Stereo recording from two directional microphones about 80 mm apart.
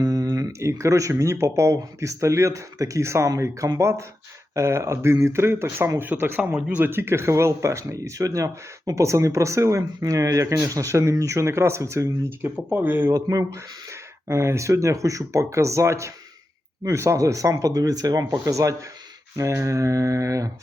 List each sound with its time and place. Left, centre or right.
0.0 s a sound: right
0.6 s speech: right
12.6 s speech: right
13.1 s speech: right